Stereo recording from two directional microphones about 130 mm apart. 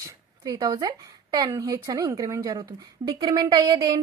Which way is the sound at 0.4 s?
30° right (ahead or behind).